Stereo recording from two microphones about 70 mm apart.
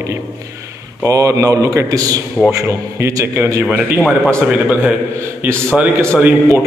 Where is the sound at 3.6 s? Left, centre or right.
Right.